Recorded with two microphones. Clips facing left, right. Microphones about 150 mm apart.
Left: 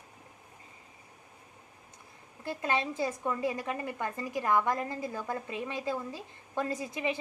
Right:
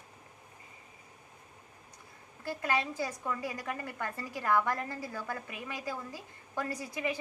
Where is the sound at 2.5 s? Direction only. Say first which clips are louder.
Left 1 dB; 25° left (ahead or behind).